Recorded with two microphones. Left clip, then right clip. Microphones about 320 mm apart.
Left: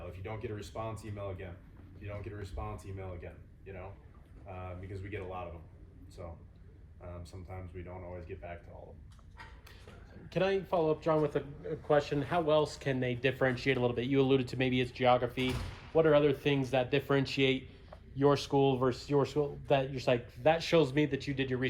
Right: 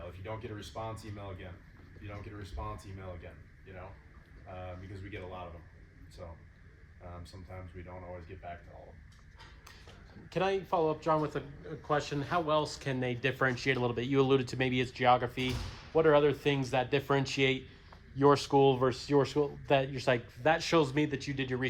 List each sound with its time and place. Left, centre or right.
6.2 s speech: centre
7.8 s speech: centre
10.2 s speech: centre